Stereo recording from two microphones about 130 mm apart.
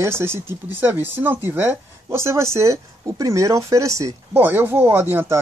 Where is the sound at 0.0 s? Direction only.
20° right (ahead or behind).